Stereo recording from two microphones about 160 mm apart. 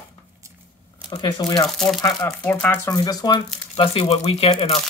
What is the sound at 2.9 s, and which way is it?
Speech, 25° left (ahead or behind).